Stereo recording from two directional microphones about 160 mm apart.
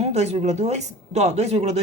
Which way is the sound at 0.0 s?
45° right (ahead or behind).